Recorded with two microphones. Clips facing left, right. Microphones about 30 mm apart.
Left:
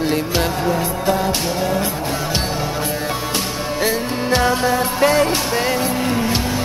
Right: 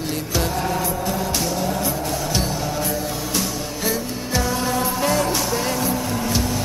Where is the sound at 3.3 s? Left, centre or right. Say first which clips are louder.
Left 3 dB; left.